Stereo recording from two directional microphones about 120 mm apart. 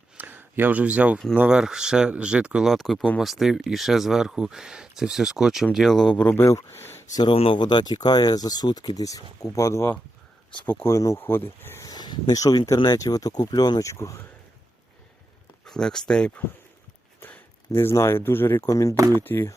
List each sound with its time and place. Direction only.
0.2 s speech: 15° right (ahead or behind); by 7.0 s 20° left (ahead or behind)
7.3 s speech: 55° left (ahead or behind)
7.6 s speech: 35° left (ahead or behind); by 11.9 s 20° left (ahead or behind)
11.9 s speech: 35° left (ahead or behind)
15.6 s speech: 5° left (ahead or behind)
17.2 s a sound: 15° left (ahead or behind)
17.7 s speech: 20° left (ahead or behind)
19.1 s speech: 20° left (ahead or behind)